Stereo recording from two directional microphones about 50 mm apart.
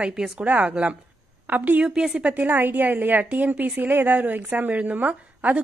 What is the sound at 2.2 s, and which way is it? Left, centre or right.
A woman's voice, right.